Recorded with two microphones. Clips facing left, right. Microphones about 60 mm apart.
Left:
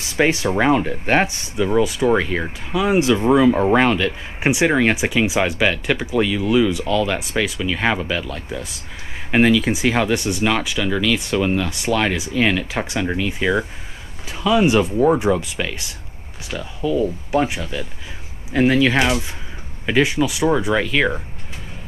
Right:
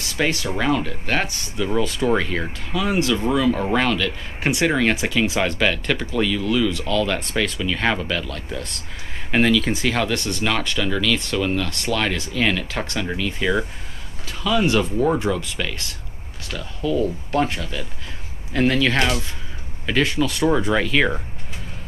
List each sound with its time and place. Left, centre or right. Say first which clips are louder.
0.0 s speech: left 5 dB; left; by 21.2 s centre